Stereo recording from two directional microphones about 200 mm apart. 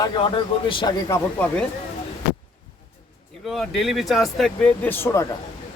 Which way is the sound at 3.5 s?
Centre (ahead or behind).